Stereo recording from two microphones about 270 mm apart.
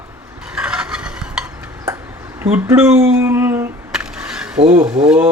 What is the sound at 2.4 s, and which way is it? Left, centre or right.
Speech, centre.